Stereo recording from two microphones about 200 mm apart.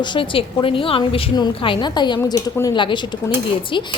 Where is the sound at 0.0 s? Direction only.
25° left (ahead or behind).